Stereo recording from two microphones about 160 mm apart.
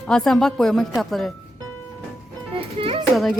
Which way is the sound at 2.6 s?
35° right (ahead or behind).